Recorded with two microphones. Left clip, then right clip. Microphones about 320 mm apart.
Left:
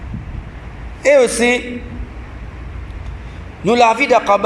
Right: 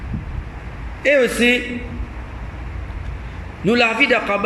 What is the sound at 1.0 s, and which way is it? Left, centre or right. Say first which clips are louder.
Speech: left 4 dB; centre.